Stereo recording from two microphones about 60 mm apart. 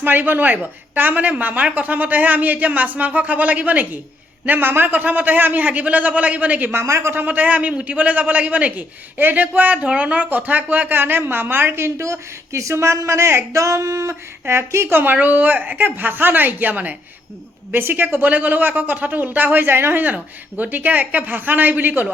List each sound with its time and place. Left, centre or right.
0.0 s a man's voice: right
6.8 s a man's voice: right
7.1 s a man's voice: right
13.6 s speech: right